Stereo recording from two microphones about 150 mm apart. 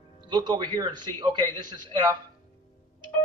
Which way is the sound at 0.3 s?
30° right (ahead or behind).